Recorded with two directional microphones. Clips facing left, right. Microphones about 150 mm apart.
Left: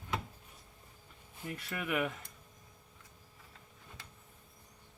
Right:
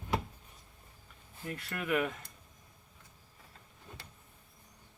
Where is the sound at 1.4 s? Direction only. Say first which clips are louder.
Right 2 dB; 5° left (ahead or behind).